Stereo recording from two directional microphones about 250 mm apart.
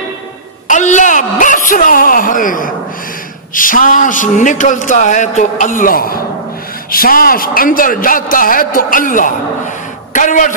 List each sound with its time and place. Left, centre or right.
0.7 s a man's voice: left